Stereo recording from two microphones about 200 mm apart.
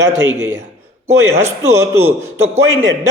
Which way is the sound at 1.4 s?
15° right (ahead or behind).